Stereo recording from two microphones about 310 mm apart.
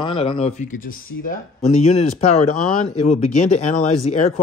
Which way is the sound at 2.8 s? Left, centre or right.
Left.